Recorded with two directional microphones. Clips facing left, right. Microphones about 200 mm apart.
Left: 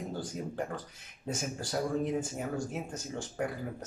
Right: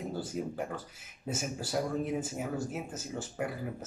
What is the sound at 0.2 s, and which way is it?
Speech, 5° right (ahead or behind).